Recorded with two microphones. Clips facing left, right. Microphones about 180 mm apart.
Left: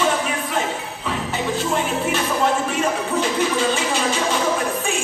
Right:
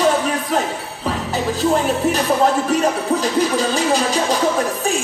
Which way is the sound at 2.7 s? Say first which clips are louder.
Right 4 dB; 40° right (ahead or behind).